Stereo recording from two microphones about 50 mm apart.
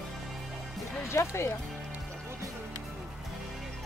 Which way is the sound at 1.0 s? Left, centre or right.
Left.